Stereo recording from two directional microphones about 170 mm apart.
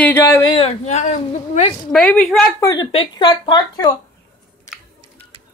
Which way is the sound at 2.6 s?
20° left (ahead or behind).